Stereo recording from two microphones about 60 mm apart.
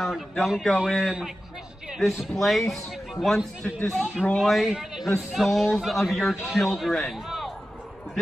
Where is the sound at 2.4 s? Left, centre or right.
Centre.